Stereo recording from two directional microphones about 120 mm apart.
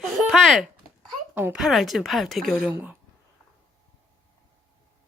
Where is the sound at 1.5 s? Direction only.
Centre (ahead or behind).